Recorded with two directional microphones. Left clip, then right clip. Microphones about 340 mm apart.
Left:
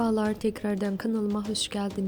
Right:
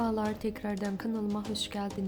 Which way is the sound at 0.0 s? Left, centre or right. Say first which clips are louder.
Left 5 dB; centre.